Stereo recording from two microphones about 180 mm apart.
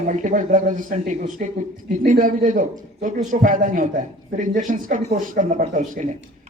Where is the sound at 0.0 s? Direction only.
45° right (ahead or behind).